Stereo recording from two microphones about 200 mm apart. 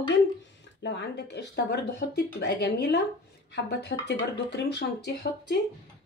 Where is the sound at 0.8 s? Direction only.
60° left (ahead or behind).